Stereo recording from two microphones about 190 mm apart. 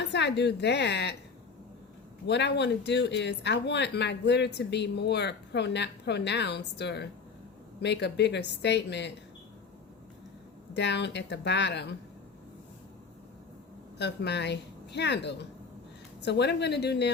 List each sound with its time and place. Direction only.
0.0 s a woman's voice: 65° left (ahead or behind)
2.2 s speech: 65° left (ahead or behind)
10.8 s speech: 65° left (ahead or behind)
14.0 s speech: 65° left (ahead or behind)